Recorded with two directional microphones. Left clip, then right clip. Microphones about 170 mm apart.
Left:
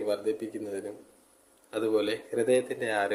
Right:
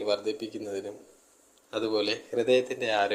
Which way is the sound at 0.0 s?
10° left (ahead or behind).